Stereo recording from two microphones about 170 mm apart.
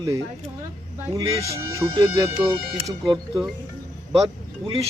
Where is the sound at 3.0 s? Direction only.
Centre (ahead or behind).